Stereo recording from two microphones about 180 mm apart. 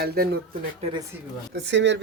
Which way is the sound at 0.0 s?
60° right (ahead or behind).